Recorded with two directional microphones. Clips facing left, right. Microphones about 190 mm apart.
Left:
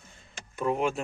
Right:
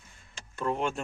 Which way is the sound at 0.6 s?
5° left (ahead or behind).